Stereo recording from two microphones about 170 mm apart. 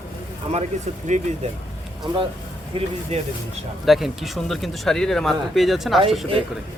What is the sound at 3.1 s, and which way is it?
Speech, 40° right (ahead or behind).